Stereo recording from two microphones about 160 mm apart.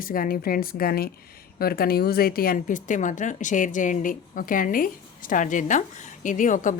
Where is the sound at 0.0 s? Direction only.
65° left (ahead or behind).